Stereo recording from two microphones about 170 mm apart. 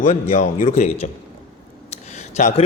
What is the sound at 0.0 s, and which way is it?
A man's voice, 45° left (ahead or behind).